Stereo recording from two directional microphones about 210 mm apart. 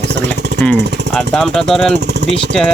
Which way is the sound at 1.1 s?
5° left (ahead or behind).